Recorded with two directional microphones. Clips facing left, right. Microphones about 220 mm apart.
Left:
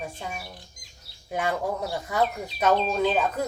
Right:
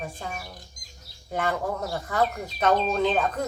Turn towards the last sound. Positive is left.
turn(degrees=5)  # may be behind; listen again after turning